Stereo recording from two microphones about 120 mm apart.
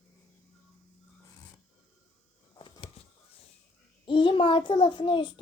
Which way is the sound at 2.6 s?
50° left (ahead or behind).